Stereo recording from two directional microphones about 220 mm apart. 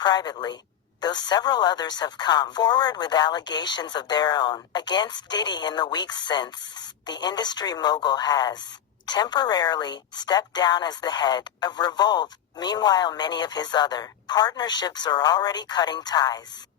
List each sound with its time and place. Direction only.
0.0 s speech: 20° left (ahead or behind)